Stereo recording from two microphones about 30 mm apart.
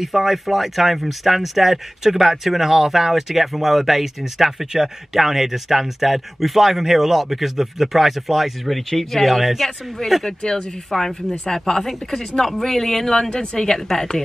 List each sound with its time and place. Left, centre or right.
0.0 s speech: centre
10.2 s speech: left